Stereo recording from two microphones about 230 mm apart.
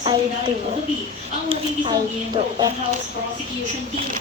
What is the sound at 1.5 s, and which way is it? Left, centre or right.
A woman's voice, centre.